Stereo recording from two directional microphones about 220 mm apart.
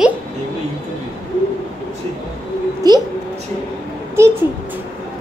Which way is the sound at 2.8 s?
15° right (ahead or behind).